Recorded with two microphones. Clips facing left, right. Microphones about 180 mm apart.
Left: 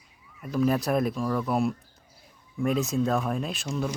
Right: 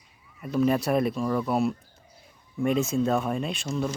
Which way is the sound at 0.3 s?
Centre (ahead or behind).